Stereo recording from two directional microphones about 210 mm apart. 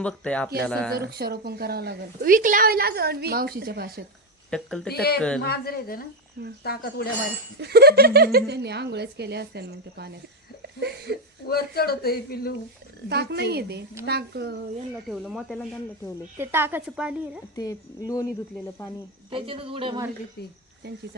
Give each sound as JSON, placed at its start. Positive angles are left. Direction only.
{"t": 0.0, "sound": "speech", "side_deg": 5}
{"t": 0.9, "sound": "a woman's voice", "side_deg": -50}
{"t": 4.5, "sound": "speech", "side_deg": 0}
{"t": 5.4, "sound": "a man's voice", "side_deg": 45}
{"t": 7.6, "sound": "a woman's voice", "side_deg": -50}
{"t": 10.6, "sound": "laughter", "side_deg": -50}
{"t": 11.4, "sound": "a man's voice", "side_deg": 45}
{"t": 13.1, "sound": "a woman's voice", "side_deg": -50}
{"t": 15.1, "sound": "speech", "side_deg": -5}
{"t": 16.4, "sound": "a woman's voice", "side_deg": -10}
{"t": 17.5, "sound": "speech", "side_deg": 15}
{"t": 19.3, "sound": "speech", "side_deg": -25}